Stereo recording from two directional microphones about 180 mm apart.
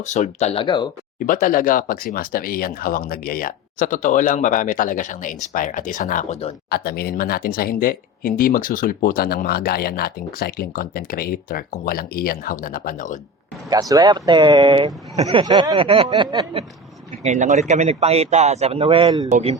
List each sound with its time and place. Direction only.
0.0 s speech: 40° left (ahead or behind)
1.3 s speech: 50° left (ahead or behind)
6.7 s speech: 60° left (ahead or behind)
13.7 s speech: 20° right (ahead or behind)
17.2 s a man's voice: 40° right (ahead or behind); by 19.3 s 25° right (ahead or behind)
19.3 s a man's voice: 35° right (ahead or behind)